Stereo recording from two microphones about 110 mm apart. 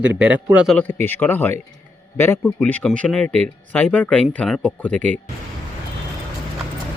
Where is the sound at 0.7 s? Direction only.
15° left (ahead or behind).